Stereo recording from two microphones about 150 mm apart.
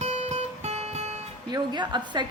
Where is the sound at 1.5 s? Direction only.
30° right (ahead or behind).